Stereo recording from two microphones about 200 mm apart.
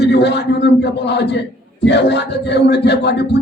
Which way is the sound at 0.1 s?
60° left (ahead or behind).